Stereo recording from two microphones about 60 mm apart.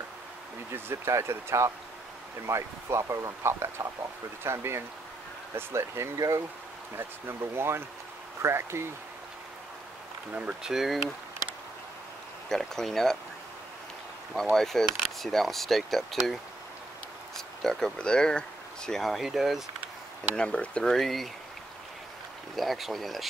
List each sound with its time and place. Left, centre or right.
0.7 s speech: right
6.1 s speech: right
7.0 s speech: right
10.6 s speech: centre
12.4 s speech: centre
14.3 s speech: centre
17.6 s speech: centre
20.3 s speech: centre
22.6 s speech: centre